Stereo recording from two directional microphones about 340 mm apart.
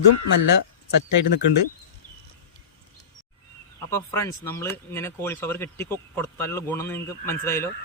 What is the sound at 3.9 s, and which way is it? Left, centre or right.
Speech, centre.